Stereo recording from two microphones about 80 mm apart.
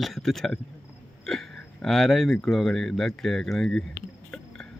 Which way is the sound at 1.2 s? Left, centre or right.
Centre.